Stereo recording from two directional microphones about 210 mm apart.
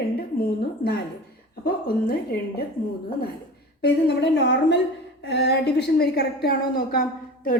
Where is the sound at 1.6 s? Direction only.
45° left (ahead or behind).